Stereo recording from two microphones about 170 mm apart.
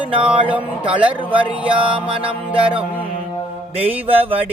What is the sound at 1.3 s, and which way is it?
Music, 10° right (ahead or behind).